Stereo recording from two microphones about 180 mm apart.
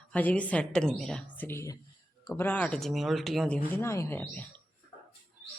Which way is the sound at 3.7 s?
15° left (ahead or behind).